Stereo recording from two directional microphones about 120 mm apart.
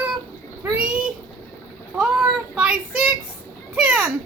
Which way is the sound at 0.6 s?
15° right (ahead or behind).